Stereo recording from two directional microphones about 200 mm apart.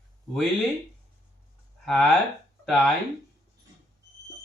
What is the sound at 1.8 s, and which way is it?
Speech, 5° left (ahead or behind).